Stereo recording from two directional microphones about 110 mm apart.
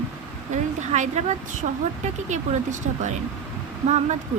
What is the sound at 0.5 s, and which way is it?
Speech, 90° right.